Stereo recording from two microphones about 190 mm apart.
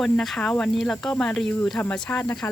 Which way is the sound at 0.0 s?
Centre (ahead or behind).